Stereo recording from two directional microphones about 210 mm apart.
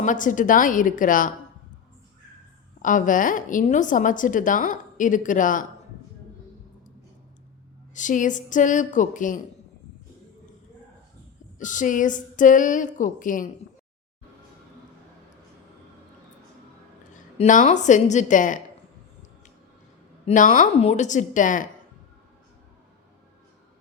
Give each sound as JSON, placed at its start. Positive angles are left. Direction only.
{"t": 0.0, "sound": "a woman's voice", "side_deg": 40}
{"t": 2.8, "sound": "a woman's voice", "side_deg": 40}
{"t": 7.9, "sound": "a woman's voice", "side_deg": 35}
{"t": 11.6, "sound": "a woman's voice", "side_deg": 35}
{"t": 17.2, "sound": "a woman's voice", "side_deg": 35}
{"t": 20.2, "sound": "a woman's voice", "side_deg": 35}